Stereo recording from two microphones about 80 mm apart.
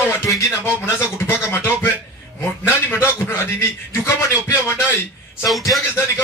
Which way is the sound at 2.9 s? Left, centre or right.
Left.